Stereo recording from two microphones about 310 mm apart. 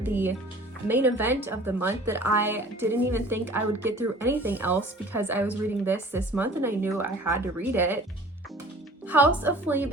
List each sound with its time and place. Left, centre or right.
0.0 s a woman's voice: centre
9.0 s a woman's voice: centre